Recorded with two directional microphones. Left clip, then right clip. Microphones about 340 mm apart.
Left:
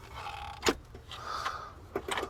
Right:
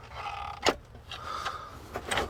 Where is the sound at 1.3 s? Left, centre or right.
Left.